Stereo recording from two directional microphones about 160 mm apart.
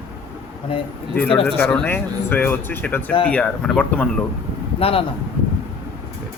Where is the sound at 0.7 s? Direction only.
35° left (ahead or behind).